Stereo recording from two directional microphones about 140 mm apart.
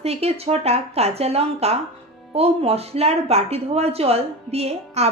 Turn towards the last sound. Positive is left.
turn(degrees=-50)  # may be behind; listen again after turning